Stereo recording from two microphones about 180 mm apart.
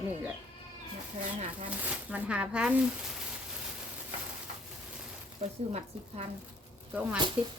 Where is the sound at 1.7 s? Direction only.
5° right (ahead or behind).